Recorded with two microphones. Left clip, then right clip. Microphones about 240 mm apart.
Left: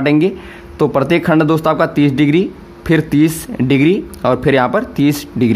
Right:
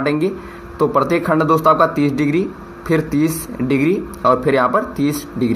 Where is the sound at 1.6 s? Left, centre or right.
Left.